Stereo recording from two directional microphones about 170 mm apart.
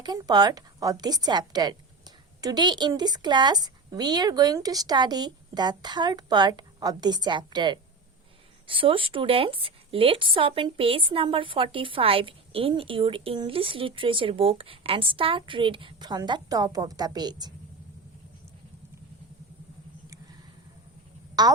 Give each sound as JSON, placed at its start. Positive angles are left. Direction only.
{"t": 0.0, "sound": "a woman's voice", "side_deg": -25}
{"t": 21.4, "sound": "a woman's voice", "side_deg": -25}